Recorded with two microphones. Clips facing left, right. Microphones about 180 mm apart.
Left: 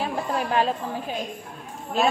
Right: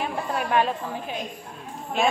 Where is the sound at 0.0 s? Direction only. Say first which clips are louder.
Left 1 dB; 30° left (ahead or behind).